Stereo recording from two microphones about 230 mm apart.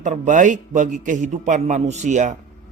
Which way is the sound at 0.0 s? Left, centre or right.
Right.